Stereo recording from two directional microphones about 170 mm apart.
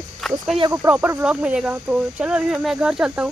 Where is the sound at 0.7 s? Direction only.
15° right (ahead or behind).